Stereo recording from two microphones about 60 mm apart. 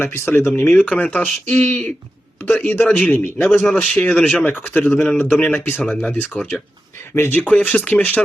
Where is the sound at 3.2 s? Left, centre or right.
Left.